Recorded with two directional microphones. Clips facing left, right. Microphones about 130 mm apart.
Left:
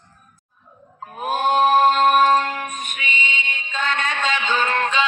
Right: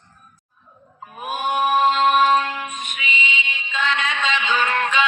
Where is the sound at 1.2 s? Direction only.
50° left (ahead or behind).